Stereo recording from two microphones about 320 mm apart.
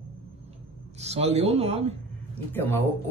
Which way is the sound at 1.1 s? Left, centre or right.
Centre.